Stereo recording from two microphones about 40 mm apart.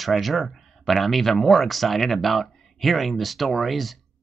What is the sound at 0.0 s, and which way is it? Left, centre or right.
Speech, centre.